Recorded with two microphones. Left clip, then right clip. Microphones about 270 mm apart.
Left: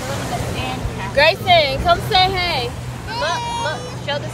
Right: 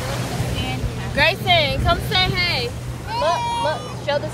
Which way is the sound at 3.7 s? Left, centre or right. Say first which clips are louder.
Right 1 dB; right.